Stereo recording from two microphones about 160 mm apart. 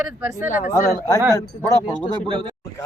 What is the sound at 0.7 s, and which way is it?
A man's voice, 20° left (ahead or behind).